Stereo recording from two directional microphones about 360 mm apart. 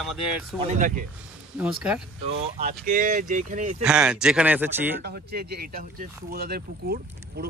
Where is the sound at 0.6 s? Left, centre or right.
Right.